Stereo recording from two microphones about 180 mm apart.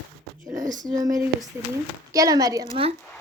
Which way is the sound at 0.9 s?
20° right (ahead or behind).